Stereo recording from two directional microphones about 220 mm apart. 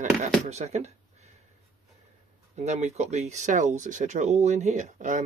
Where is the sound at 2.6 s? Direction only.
30° right (ahead or behind).